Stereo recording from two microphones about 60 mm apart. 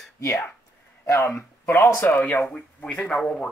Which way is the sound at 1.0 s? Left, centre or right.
Left.